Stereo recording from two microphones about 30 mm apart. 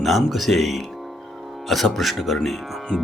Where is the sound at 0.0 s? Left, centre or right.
Centre.